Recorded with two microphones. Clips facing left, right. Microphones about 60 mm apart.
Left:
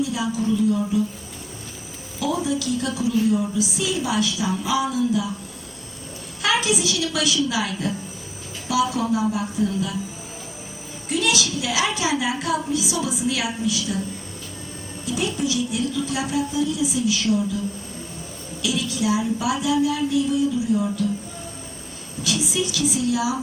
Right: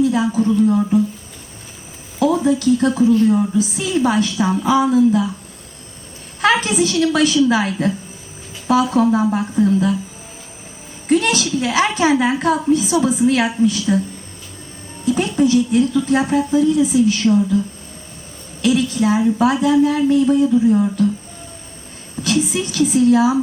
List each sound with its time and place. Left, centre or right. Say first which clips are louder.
0.0 s a sound: right 8 dB; right
0.9 s a woman's voice: right 6 dB; right
2.1 s a woman's voice: right 8 dB; right
6.4 s a woman's voice: right 6 dB; right
11.1 s a woman's voice: right 7 dB; right
15.0 s a woman's voice: right 8 dB; right
18.6 s a woman's voice: right 8 dB; right
22.2 s a woman's voice: right 6 dB; right